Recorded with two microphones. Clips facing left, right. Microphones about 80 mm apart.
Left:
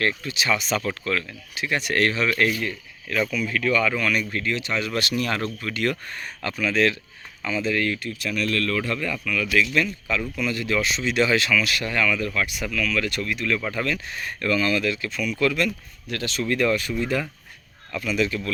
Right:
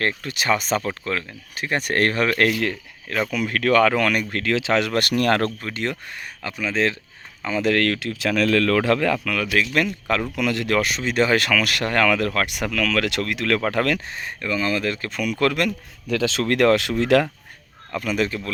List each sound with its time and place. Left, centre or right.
0.2 s speech: right
0.9 s speech: right
1.5 s speech: right
3.1 s speech: right
3.3 s speech: right
4.9 s speech: right
5.5 s speech: right
7.6 s speech: right
9.5 s speech: right
10.3 s speech: right
14.1 s speech: right
16.4 s speech: right
17.9 s speech: right